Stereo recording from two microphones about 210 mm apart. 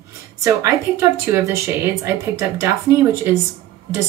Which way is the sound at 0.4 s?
15° right (ahead or behind).